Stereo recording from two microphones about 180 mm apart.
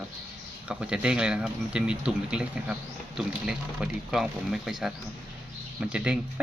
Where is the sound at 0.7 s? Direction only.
5° right (ahead or behind).